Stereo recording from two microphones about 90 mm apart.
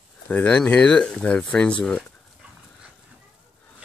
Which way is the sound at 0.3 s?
15° left (ahead or behind).